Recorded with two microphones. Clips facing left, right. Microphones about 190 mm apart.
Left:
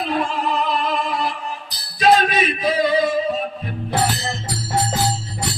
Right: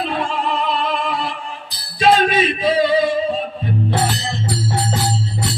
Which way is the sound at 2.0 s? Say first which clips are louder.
Right 1 dB; 30° right (ahead or behind).